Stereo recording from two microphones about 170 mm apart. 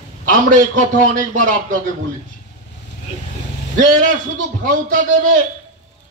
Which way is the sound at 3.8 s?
50° right (ahead or behind).